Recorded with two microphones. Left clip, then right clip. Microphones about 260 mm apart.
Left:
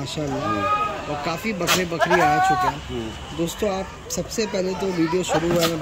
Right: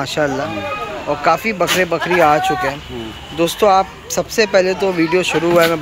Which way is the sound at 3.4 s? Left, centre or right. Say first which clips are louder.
Right 13 dB; centre.